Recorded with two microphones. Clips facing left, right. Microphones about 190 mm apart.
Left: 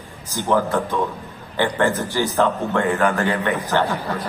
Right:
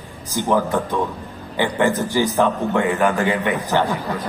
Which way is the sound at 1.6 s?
15° right (ahead or behind).